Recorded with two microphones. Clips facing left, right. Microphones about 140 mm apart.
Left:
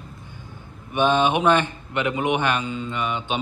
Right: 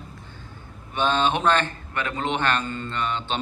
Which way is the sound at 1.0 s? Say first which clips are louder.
Left 3 dB; 15° left (ahead or behind).